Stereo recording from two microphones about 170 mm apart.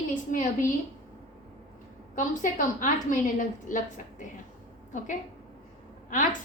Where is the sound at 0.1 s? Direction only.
50° left (ahead or behind).